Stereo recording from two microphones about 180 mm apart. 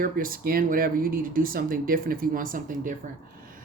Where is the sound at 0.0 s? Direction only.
50° right (ahead or behind).